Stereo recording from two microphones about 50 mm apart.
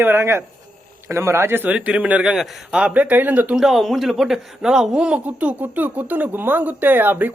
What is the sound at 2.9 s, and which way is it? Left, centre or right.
Speech, right.